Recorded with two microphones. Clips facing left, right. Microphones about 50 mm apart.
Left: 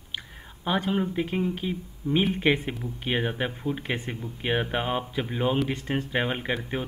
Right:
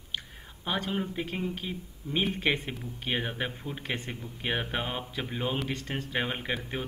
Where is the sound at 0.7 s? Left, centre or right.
Centre.